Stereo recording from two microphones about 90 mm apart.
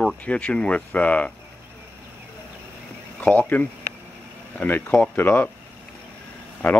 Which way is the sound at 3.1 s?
20° left (ahead or behind).